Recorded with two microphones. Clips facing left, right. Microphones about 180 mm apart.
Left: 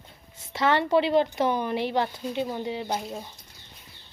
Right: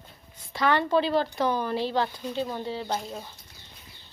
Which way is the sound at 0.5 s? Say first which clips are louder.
Left 1 dB; 25° left (ahead or behind).